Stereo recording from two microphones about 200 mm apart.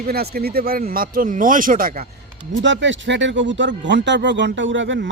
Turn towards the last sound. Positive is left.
turn(degrees=-65)  # may be behind; listen again after turning